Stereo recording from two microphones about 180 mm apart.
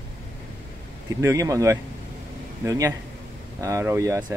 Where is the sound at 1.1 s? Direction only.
15° right (ahead or behind).